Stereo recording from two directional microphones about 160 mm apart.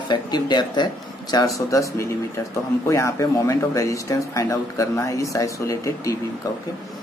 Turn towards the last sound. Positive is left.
turn(degrees=20)  # may be behind; listen again after turning